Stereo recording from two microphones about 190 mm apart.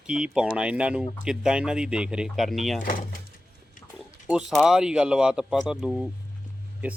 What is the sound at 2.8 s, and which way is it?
Speech, 50° left (ahead or behind).